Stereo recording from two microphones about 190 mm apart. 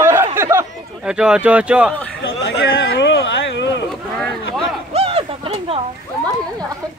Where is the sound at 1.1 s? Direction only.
5° right (ahead or behind).